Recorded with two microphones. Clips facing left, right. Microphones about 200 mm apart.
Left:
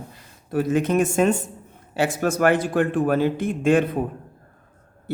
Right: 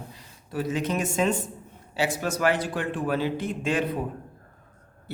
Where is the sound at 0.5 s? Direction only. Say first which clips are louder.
Left 7 dB; 50° left (ahead or behind).